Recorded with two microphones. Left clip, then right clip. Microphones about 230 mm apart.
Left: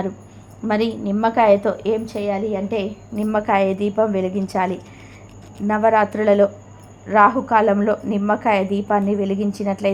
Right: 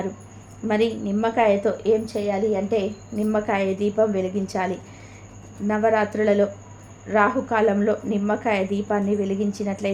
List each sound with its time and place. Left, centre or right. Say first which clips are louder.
0.7 s a woman's voice: left 1 dB; centre